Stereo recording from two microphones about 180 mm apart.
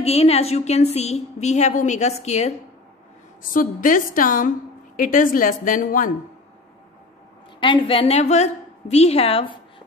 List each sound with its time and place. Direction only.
0.0 s a woman's voice: 35° left (ahead or behind)
3.5 s a woman's voice: 50° left (ahead or behind)
7.6 s a woman's voice: 30° left (ahead or behind)